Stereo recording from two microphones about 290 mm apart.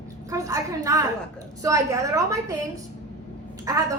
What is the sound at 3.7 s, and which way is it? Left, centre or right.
Speech, centre.